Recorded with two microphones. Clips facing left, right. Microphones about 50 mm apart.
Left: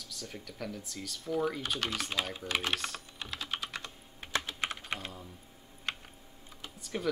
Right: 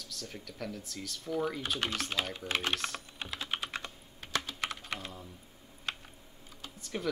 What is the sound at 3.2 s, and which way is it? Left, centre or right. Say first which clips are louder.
Typing: right 1 dB; centre.